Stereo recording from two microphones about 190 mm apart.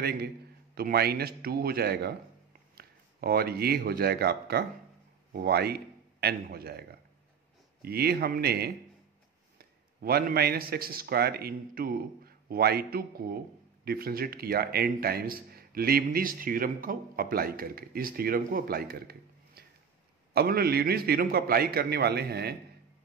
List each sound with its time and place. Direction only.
0.0 s a man's voice: 55° right (ahead or behind)